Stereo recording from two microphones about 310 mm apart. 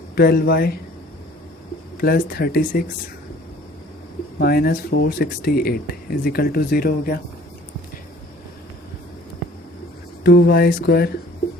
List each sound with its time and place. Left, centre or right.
0.2 s speech: left
2.0 s speech: left
4.4 s speech: left
10.2 s speech: left